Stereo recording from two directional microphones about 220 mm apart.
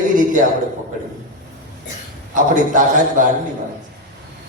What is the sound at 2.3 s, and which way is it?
Speech, 35° right (ahead or behind).